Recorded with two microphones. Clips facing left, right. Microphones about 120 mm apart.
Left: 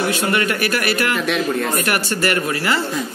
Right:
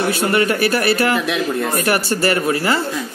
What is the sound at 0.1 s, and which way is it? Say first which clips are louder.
Speech: right 3 dB; 30° right (ahead or behind).